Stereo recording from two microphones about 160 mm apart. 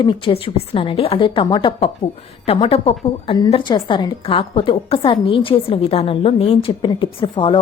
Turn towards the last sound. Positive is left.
turn(degrees=30)  # may be behind; listen again after turning